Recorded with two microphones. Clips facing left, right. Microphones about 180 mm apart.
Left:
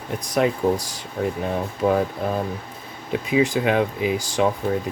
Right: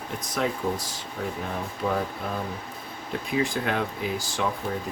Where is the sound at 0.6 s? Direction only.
55° left (ahead or behind).